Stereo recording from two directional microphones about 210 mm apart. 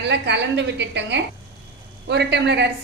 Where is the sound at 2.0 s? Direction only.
55° right (ahead or behind).